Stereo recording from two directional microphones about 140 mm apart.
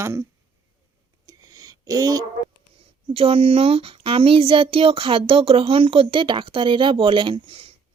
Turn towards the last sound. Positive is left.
turn(degrees=-45)  # may be behind; listen again after turning